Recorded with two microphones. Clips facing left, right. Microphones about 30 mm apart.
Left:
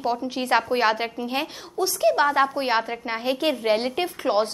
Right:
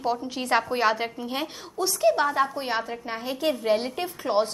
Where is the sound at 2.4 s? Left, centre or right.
Left.